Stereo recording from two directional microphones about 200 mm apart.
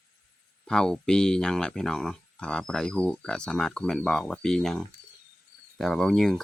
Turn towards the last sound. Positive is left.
turn(degrees=0)  # may be behind; listen again after turning